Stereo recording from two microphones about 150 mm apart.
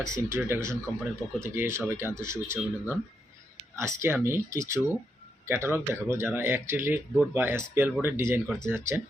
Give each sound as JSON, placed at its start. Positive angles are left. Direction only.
{"t": 0.0, "sound": "speech", "side_deg": -20}